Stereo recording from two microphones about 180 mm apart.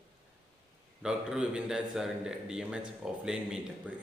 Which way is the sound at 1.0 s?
5° right (ahead or behind).